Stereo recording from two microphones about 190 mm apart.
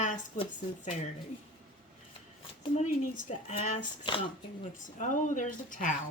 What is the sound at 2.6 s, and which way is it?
Speech, 35° left (ahead or behind).